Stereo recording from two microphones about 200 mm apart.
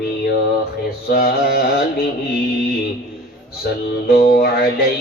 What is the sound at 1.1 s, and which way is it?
Carnatic music, 50° left (ahead or behind).